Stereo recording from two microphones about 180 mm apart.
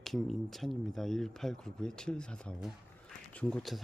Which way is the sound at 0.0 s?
Centre (ahead or behind).